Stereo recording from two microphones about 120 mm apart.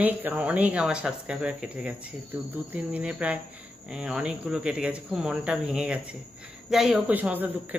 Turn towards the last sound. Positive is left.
turn(degrees=-15)  # may be behind; listen again after turning